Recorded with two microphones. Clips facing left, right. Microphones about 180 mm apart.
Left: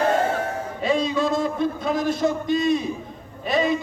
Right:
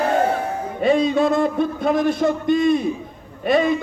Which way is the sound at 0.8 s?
55° right (ahead or behind).